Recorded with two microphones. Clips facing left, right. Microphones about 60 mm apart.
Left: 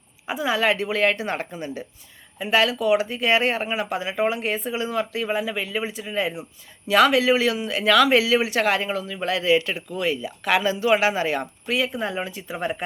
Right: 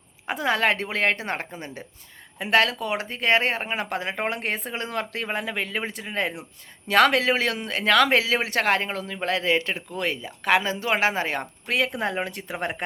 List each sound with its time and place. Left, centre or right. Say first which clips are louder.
0.3 s speech: left 1 dB; right
2.4 s speech: even; right
2.7 s speech: left 8 dB; right
11.9 s speech: even; right